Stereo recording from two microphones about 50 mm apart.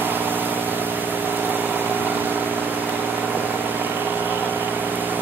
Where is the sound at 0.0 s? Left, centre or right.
Right.